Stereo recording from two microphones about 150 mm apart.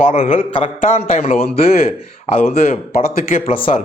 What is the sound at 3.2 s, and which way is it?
Speech, 65° left (ahead or behind).